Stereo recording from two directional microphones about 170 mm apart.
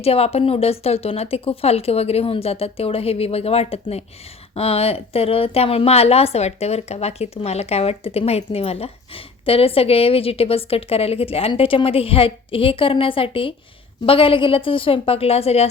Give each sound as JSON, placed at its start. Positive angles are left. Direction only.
{"t": 0.0, "sound": "speech", "side_deg": 35}